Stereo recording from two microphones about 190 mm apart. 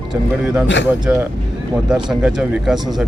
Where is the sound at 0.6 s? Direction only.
70° left (ahead or behind).